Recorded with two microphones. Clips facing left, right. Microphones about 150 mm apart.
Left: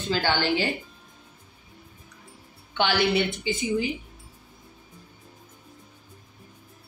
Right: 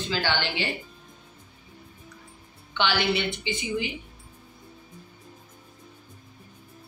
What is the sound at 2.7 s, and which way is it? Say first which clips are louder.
Speech: left 2 dB; 45° left (ahead or behind).